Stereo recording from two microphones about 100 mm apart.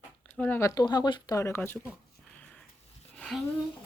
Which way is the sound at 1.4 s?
25° left (ahead or behind).